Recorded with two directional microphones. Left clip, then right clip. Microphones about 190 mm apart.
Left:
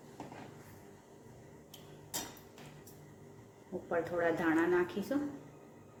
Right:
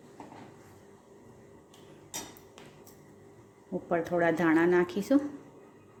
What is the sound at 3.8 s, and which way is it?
Speech, 50° right (ahead or behind).